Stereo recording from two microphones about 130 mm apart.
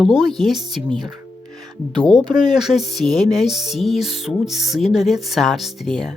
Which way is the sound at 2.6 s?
Centre (ahead or behind).